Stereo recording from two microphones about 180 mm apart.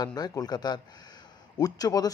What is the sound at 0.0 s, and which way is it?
Speech, 20° left (ahead or behind).